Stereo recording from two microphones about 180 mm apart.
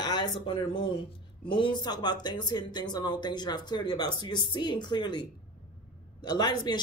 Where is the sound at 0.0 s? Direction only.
25° left (ahead or behind).